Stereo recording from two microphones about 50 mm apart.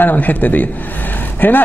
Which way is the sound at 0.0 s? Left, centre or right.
Left.